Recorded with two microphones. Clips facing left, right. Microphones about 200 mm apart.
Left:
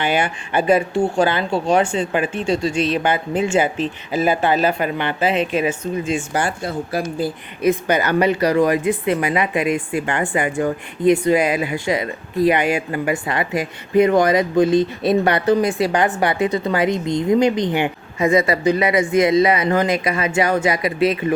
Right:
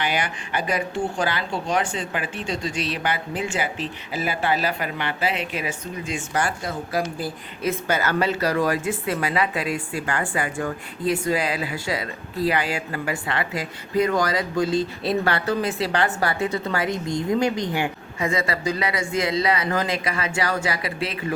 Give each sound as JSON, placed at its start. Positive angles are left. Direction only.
{"t": 0.0, "sound": "speech", "side_deg": 25}
{"t": 1.5, "sound": "speech", "side_deg": 65}
{"t": 1.7, "sound": "speech", "side_deg": 25}